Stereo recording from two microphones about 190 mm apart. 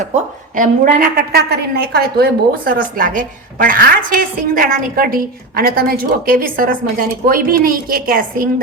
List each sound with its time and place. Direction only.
0.5 s a woman's voice: 45° right (ahead or behind)